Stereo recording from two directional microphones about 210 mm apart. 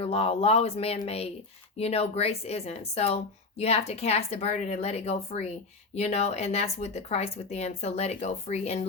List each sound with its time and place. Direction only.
0.0 s speech: 30° left (ahead or behind)